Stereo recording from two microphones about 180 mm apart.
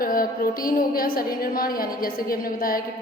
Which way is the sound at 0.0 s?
50° left (ahead or behind).